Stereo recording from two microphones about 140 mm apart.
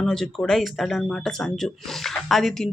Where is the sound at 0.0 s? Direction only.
5° left (ahead or behind).